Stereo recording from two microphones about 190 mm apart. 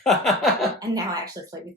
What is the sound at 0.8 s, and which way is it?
Speech, 20° right (ahead or behind).